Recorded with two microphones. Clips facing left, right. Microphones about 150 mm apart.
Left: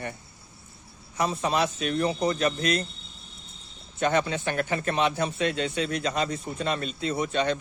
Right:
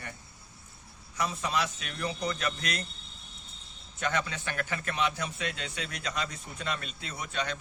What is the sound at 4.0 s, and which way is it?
A man's voice, 25° left (ahead or behind).